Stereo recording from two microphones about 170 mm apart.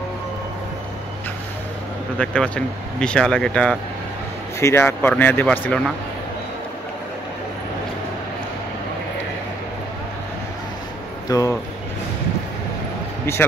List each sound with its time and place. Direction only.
2.1 s speech: 5° left (ahead or behind)
4.6 s speech: 15° left (ahead or behind)
11.2 s speech: 20° left (ahead or behind)
13.2 s a man's voice: 15° left (ahead or behind)